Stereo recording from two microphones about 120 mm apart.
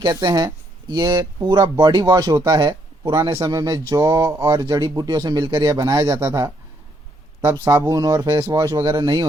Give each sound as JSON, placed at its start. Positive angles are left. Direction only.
{"t": 0.0, "sound": "speech", "side_deg": -35}
{"t": 2.6, "sound": "speech", "side_deg": -40}
{"t": 3.3, "sound": "speech", "side_deg": -30}
{"t": 9.0, "sound": "speech", "side_deg": -40}